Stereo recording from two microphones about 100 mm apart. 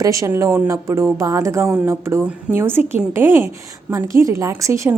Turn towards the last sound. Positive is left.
turn(degrees=-30)  # may be behind; listen again after turning